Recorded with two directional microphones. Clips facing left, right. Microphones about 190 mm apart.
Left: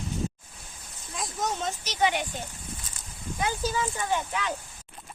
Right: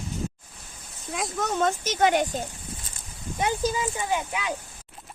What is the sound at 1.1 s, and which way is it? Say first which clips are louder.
Speech: right 4 dB; 60° right (ahead or behind).